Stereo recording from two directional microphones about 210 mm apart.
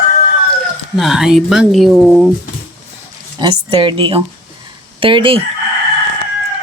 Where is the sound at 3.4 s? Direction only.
25° right (ahead or behind).